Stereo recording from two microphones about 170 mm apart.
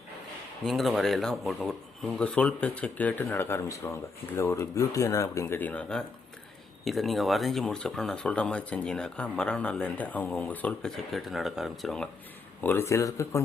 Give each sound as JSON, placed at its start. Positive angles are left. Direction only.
{"t": 0.6, "sound": "speech", "side_deg": 0}
{"t": 12.6, "sound": "speech", "side_deg": 15}